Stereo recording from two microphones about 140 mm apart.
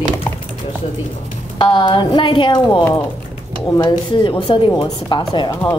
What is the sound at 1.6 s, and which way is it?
A woman's voice, 35° left (ahead or behind).